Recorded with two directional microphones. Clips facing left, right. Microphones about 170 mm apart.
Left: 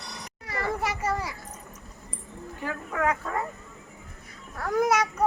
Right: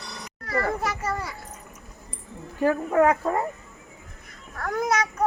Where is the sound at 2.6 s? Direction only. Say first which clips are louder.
Right 8 dB; 35° right (ahead or behind).